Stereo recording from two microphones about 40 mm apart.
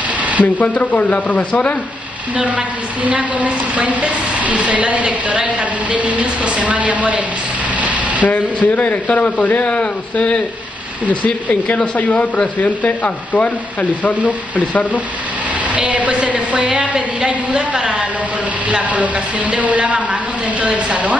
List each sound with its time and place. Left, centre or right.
0.2 s a sound: right
0.6 s speech: left
2.3 s a woman's voice: right
7.8 s a sound: right
8.3 s speech: left
9.7 s speech: left
15.7 s a woman's voice: right